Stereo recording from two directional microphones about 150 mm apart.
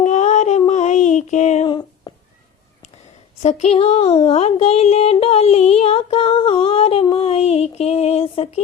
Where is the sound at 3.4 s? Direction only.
45° left (ahead or behind).